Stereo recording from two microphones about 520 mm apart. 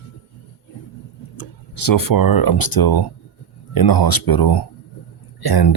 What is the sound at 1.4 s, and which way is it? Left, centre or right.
Speech, left.